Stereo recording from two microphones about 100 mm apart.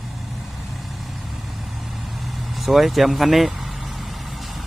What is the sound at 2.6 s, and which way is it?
Speech, centre (ahead or behind).